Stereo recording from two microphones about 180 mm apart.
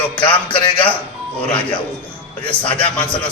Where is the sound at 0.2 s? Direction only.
30° left (ahead or behind).